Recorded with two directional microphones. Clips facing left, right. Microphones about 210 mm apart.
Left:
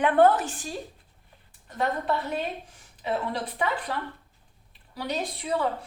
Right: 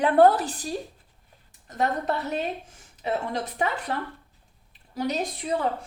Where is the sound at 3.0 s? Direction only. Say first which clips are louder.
Right 1 dB; 40° right (ahead or behind).